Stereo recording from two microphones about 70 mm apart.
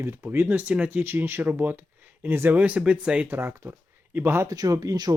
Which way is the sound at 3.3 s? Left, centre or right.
Right.